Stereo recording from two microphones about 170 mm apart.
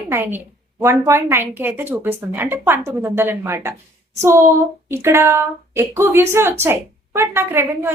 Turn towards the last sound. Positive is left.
turn(degrees=-15)  # may be behind; listen again after turning